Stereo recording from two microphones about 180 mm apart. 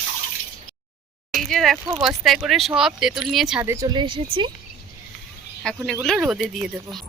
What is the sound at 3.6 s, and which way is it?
Speech, 15° right (ahead or behind).